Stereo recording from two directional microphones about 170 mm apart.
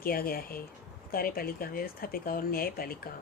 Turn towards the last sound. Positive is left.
turn(degrees=60)  # may be behind; listen again after turning